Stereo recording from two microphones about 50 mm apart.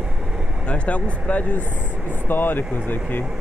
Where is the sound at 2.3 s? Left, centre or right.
Left.